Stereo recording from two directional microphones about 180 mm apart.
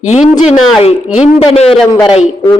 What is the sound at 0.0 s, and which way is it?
A man's voice, 40° left (ahead or behind).